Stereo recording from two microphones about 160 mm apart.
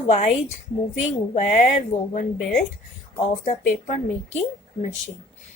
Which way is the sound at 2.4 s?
Centre (ahead or behind).